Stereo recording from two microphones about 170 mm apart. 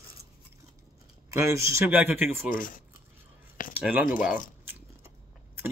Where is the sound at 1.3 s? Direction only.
15° right (ahead or behind).